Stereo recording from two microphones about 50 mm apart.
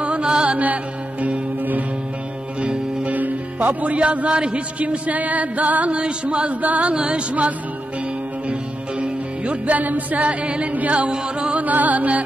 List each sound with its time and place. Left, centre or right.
0.0 s music: right
1.2 s music: right
9.0 s music: right